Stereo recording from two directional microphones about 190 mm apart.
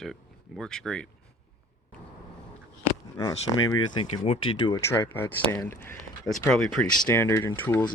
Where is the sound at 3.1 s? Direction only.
20° left (ahead or behind).